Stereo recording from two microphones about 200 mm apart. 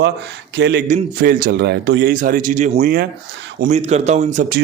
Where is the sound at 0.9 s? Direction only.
40° right (ahead or behind).